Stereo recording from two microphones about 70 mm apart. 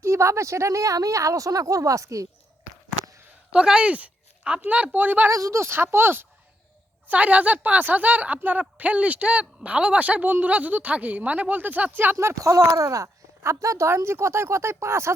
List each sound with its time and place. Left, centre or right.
0.0 s a woman's voice: right
3.5 s a woman's voice: centre
5.3 s speech: right
7.1 s a woman's voice: right
12.1 s a woman's voice: right